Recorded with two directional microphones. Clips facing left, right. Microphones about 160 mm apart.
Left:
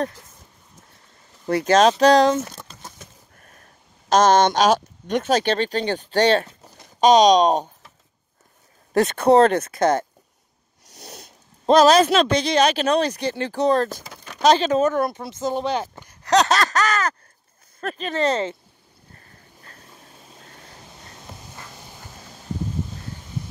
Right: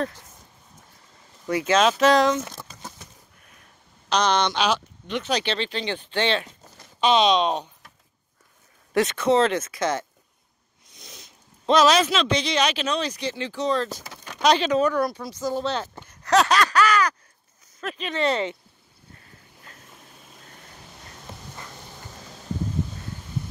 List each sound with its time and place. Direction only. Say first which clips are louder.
1.4 s speech: left 4 dB; 35° left (ahead or behind)
3.3 s a sound: left 4 dB; 45° left (ahead or behind)
4.1 s speech: left 7 dB; 45° left (ahead or behind)
9.1 s speech: left 7 dB; 60° left (ahead or behind)
10.9 s sniff: left 7 dB; 65° left (ahead or behind)
11.6 s speech: left 4 dB; 45° left (ahead or behind)
15.0 s speech: left 2 dB; 25° left (ahead or behind)
16.4 s a sound: even; 40° left (ahead or behind)
17.7 s speech: left 3 dB; 45° left (ahead or behind)